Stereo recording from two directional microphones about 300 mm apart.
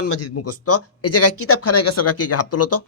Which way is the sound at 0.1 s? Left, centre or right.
Left.